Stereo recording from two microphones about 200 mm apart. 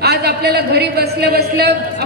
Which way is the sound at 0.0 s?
55° right (ahead or behind).